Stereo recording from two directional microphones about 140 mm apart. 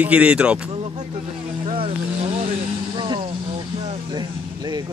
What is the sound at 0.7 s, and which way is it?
Speech, 50° right (ahead or behind).